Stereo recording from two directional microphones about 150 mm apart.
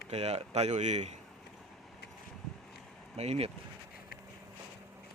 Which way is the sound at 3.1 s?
45° right (ahead or behind).